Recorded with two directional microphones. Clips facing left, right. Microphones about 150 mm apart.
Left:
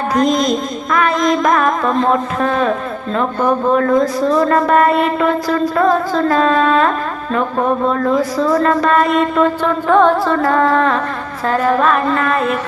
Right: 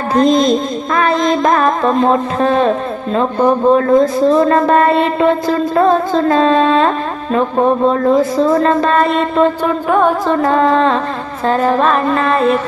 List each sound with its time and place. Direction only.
0.1 s music: 30° right (ahead or behind)
2.0 s a man's voice: 25° right (ahead or behind)
8.2 s a man's voice: 25° right (ahead or behind)
9.8 s a man's voice: 10° right (ahead or behind); by 12.5 s 25° right (ahead or behind)